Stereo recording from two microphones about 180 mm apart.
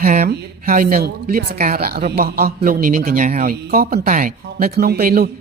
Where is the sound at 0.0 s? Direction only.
50° right (ahead or behind).